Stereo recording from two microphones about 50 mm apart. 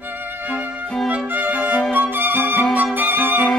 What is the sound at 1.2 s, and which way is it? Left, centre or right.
Violin, right.